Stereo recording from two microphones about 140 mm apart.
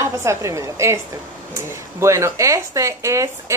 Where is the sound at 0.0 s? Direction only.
20° right (ahead or behind).